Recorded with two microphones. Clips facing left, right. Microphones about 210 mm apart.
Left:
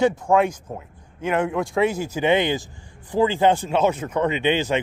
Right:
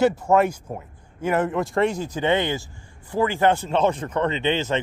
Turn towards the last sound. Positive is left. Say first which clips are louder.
# left 2 dB
turn(degrees=15)  # may be behind; listen again after turning